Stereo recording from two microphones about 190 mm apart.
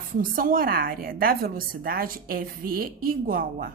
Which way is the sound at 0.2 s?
45° right (ahead or behind).